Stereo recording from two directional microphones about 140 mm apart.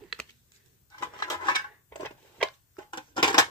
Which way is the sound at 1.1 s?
30° left (ahead or behind).